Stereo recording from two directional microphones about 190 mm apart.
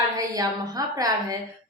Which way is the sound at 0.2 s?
20° right (ahead or behind).